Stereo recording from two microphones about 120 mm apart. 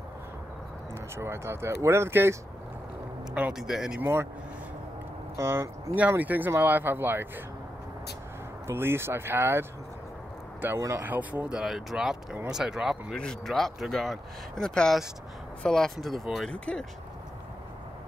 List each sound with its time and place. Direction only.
1.1 s speech: 20° right (ahead or behind)
3.5 s speech: 5° right (ahead or behind)
4.0 s speech: 15° right (ahead or behind)
5.3 s speech: 20° right (ahead or behind)
8.6 s speech: 20° right (ahead or behind); by 16.8 s 5° left (ahead or behind)